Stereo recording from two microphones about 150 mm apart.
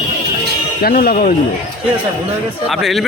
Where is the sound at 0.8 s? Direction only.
60° left (ahead or behind).